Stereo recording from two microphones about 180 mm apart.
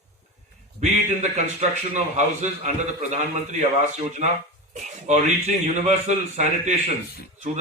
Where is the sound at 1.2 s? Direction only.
40° right (ahead or behind).